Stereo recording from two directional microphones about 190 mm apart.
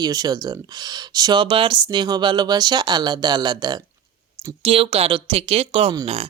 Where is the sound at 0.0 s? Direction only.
20° right (ahead or behind).